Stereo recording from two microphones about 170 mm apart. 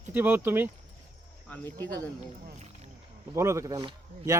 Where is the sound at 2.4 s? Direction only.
40° right (ahead or behind).